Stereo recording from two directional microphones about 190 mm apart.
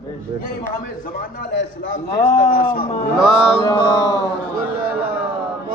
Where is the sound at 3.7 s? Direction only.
20° left (ahead or behind).